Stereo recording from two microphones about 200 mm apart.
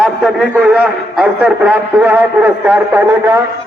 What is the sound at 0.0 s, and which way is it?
A man's voice, 5° right (ahead or behind).